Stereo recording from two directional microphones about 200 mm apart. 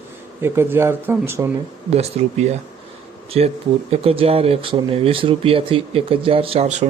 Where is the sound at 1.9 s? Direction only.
30° right (ahead or behind).